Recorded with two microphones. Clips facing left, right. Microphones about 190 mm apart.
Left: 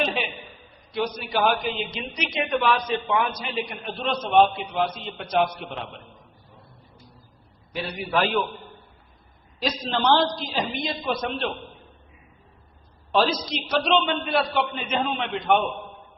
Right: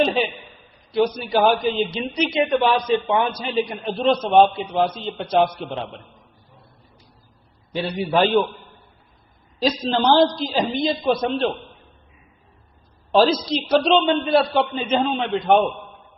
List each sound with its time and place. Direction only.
0.0 s a man's voice: 35° right (ahead or behind)
7.7 s a man's voice: 30° right (ahead or behind)
9.6 s a man's voice: 35° right (ahead or behind)
13.1 s a man's voice: 35° right (ahead or behind)